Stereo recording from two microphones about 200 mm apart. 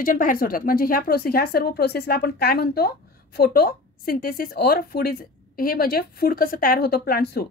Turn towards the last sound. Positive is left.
turn(degrees=50)  # may be behind; listen again after turning